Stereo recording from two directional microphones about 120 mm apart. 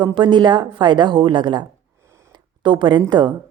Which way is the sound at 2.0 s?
25° right (ahead or behind).